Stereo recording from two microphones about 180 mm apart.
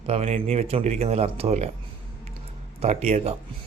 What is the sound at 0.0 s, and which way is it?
A man's voice, 35° right (ahead or behind).